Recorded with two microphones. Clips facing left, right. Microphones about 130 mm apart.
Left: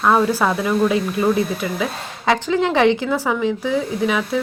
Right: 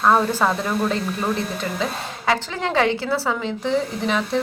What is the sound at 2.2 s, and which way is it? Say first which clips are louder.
Speech: left 5 dB; 20° left (ahead or behind).